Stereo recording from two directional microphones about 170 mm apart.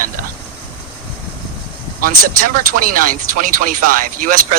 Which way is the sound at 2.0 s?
55° right (ahead or behind).